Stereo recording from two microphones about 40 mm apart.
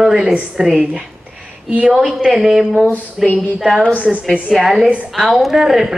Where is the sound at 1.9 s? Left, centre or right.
Centre.